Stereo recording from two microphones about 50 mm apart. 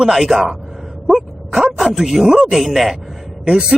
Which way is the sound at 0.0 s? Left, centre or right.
Centre.